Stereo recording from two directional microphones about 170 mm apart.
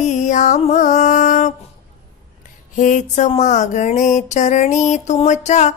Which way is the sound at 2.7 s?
45° left (ahead or behind).